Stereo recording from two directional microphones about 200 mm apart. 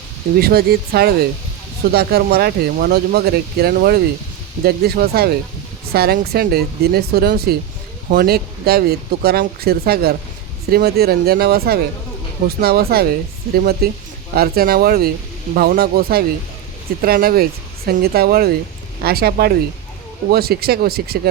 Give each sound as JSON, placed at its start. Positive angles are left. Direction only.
{"t": 0.3, "sound": "speech", "side_deg": -50}